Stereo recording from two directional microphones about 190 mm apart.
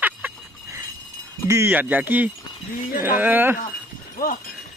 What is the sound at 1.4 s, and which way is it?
Speech, 15° right (ahead or behind).